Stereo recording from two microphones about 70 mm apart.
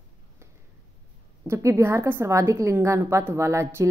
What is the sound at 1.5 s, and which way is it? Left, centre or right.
A woman's voice, right.